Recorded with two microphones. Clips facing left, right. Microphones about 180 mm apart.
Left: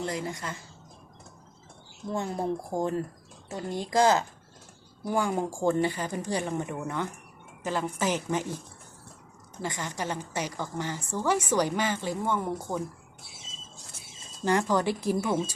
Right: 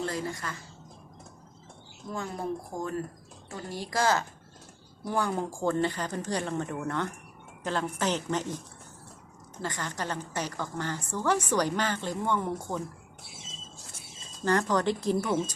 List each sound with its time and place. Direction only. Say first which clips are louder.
0.0 s speech: even; 20° left (ahead or behind)
2.0 s a woman's voice: left 4 dB; 25° left (ahead or behind); by 8.5 s 10° left (ahead or behind)
9.6 s a woman's voice: left 1 dB; 15° left (ahead or behind)
14.4 s a woman's voice: left 1 dB; 10° left (ahead or behind)